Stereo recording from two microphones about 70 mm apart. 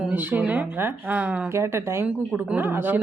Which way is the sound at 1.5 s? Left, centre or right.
Right.